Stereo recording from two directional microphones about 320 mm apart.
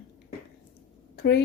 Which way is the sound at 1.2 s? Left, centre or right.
Left.